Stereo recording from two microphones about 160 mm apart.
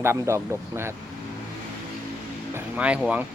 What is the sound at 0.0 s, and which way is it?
Speech, 15° right (ahead or behind).